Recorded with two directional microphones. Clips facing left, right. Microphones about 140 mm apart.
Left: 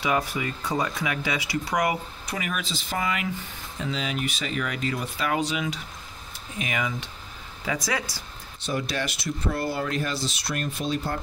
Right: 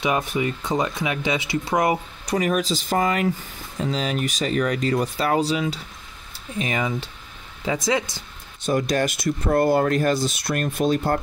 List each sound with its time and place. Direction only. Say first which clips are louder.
0.0 s speech: right 3 dB; 20° right (ahead or behind)
2.2 s speech: right 11 dB; 40° right (ahead or behind); by 8.2 s 25° right (ahead or behind)
8.6 s speech: right 7 dB; 45° right (ahead or behind)